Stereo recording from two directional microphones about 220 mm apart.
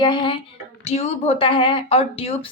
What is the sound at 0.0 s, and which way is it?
Speech, 20° left (ahead or behind).